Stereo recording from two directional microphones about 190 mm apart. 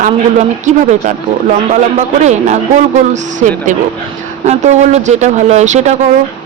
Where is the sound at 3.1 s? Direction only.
40° right (ahead or behind).